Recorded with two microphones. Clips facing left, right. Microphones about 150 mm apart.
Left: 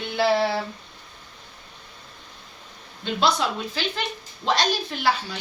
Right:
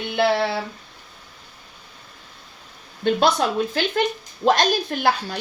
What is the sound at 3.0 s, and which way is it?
A woman's voice, 50° right (ahead or behind).